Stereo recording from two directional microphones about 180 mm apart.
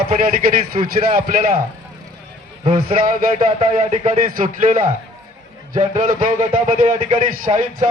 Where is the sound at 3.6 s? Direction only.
35° right (ahead or behind).